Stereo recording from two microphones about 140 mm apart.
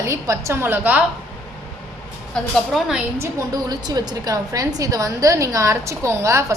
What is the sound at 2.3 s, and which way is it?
Speech, centre (ahead or behind).